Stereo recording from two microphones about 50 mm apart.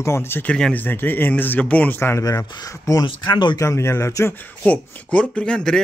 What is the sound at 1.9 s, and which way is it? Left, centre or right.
Speech, left.